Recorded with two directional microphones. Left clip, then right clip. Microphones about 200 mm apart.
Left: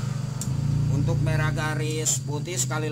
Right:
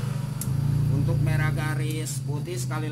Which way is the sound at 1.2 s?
35° left (ahead or behind).